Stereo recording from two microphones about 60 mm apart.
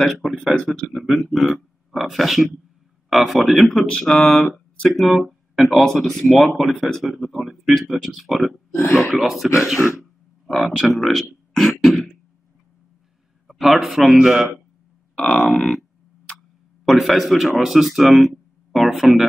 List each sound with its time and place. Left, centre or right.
0.0 s speech: centre
13.5 s speech: centre
15.3 s speech: centre
16.8 s a man's voice: centre